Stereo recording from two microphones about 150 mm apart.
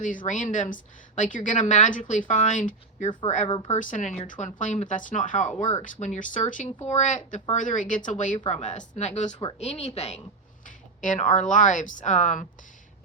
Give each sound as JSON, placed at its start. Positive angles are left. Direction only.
{"t": 0.3, "sound": "a woman's voice", "side_deg": 55}
{"t": 11.0, "sound": "a woman's voice", "side_deg": 60}